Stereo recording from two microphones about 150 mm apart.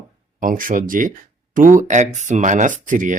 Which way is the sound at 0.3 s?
65° right (ahead or behind).